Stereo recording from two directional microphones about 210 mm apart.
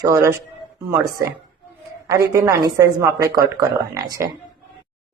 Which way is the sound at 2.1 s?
15° right (ahead or behind).